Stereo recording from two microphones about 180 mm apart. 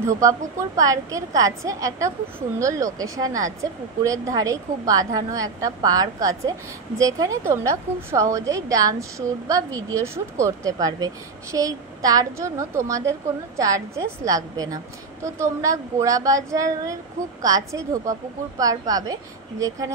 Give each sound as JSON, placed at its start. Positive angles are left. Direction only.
{"t": 0.0, "sound": "a woman's voice", "side_deg": -15}